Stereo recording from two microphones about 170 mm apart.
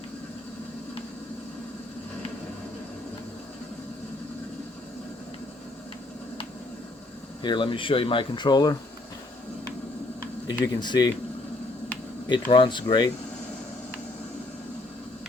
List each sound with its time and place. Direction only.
7.4 s speech: 30° left (ahead or behind)
10.8 s speech: 25° left (ahead or behind)
12.3 s speech: 30° left (ahead or behind)